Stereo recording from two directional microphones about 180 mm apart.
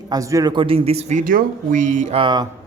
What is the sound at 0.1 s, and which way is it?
Speech, 20° right (ahead or behind).